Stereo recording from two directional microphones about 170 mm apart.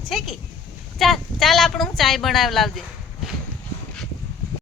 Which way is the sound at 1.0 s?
Centre (ahead or behind).